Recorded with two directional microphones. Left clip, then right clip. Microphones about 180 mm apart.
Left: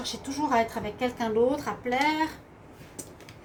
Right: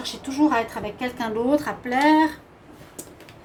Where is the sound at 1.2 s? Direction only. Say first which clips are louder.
Right 3 dB; 50° right (ahead or behind).